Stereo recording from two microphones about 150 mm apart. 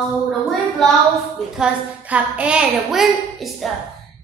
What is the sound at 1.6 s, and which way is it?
A woman's voice, 10° right (ahead or behind).